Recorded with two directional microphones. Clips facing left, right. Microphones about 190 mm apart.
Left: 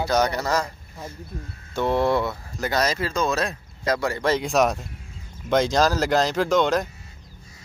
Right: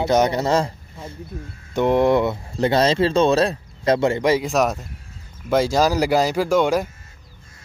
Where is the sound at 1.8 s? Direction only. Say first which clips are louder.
Right 5 dB; 15° right (ahead or behind).